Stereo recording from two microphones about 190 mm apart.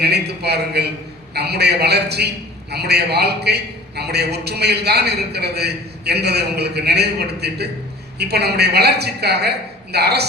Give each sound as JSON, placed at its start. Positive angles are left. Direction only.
{"t": 0.0, "sound": "a man's voice", "side_deg": -60}